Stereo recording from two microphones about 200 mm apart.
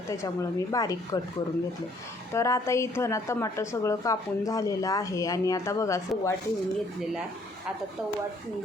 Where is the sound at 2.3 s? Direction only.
15° left (ahead or behind).